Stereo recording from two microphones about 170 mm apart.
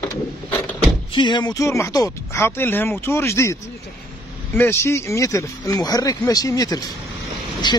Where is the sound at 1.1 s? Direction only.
25° left (ahead or behind).